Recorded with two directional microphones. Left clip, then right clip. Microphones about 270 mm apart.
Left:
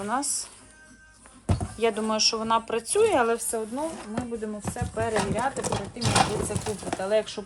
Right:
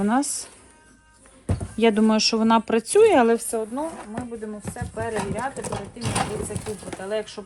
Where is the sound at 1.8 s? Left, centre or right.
Right.